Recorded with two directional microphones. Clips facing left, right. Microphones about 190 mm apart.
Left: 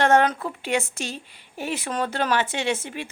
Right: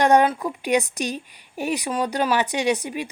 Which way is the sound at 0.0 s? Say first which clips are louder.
Right 2 dB; 15° right (ahead or behind).